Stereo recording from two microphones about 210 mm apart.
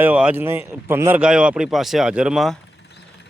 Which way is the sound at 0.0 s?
5° right (ahead or behind).